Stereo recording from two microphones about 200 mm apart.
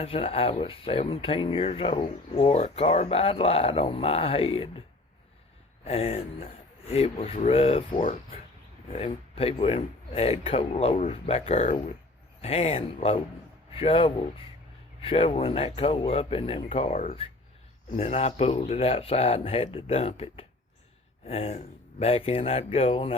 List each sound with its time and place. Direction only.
0.0 s speech: 30° left (ahead or behind)
5.8 s speech: 30° left (ahead or behind)